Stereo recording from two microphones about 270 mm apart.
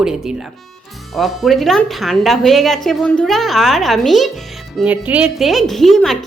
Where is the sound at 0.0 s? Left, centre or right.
Centre.